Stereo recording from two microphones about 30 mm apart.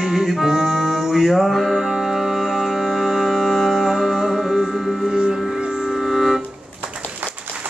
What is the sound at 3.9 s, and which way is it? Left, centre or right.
Music, centre.